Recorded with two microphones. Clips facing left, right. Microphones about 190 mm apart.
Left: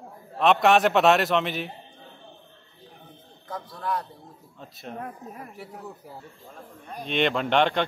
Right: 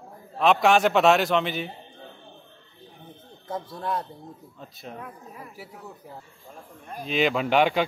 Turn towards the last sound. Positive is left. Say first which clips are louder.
# right 1 dB
turn(degrees=-5)  # may be behind; listen again after turning